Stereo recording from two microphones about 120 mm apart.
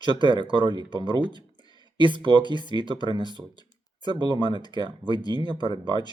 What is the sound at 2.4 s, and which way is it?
Speech, 40° left (ahead or behind).